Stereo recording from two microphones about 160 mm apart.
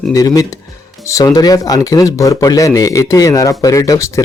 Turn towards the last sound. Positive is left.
turn(degrees=20)  # may be behind; listen again after turning